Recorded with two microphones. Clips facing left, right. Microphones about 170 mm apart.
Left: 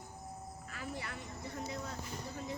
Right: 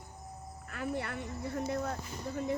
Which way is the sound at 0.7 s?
60° right (ahead or behind).